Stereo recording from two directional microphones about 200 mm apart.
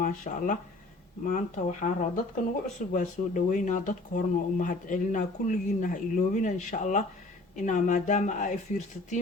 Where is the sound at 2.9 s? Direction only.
40° left (ahead or behind).